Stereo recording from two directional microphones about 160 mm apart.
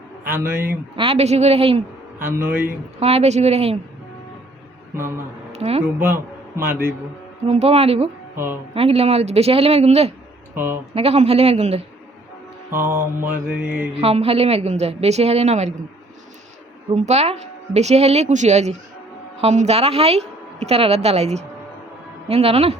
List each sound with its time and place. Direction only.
0.3 s a man's voice: 15° right (ahead or behind)
0.9 s a woman's voice: 40° right (ahead or behind)
2.1 s a man's voice: 15° right (ahead or behind)
3.0 s a woman's voice: 40° right (ahead or behind)
4.9 s a man's voice: 15° right (ahead or behind)
5.5 s a sound: 40° right (ahead or behind)
6.7 s a man's voice: 10° right (ahead or behind)
7.4 s a woman's voice: 40° right (ahead or behind)
10.5 s speech: 15° right (ahead or behind)
10.9 s a woman's voice: 40° right (ahead or behind)
12.7 s a man's voice: 15° right (ahead or behind)
13.9 s a woman's voice: 40° right (ahead or behind)
16.9 s a woman's voice: 45° right (ahead or behind)